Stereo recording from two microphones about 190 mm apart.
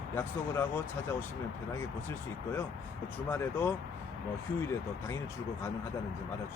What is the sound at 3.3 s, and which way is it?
Speech, 10° left (ahead or behind).